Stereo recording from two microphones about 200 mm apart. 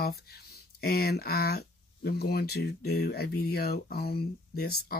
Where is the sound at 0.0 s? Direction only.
50° left (ahead or behind).